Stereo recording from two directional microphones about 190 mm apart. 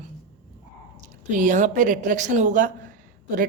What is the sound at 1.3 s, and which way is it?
A woman's voice, 40° right (ahead or behind).